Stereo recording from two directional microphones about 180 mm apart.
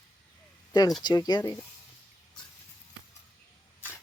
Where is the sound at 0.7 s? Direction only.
20° left (ahead or behind).